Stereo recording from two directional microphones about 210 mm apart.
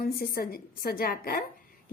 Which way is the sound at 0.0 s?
45° left (ahead or behind).